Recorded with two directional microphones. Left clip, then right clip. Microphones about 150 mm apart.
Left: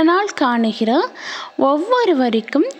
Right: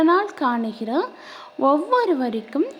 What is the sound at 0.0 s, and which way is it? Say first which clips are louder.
A woman's voice: left 3 dB; 30° left (ahead or behind).